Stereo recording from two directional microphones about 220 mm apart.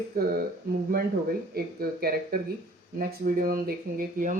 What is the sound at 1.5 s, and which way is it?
Speech, 45° right (ahead or behind).